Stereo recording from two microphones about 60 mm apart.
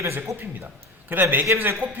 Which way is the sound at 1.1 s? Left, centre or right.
Right.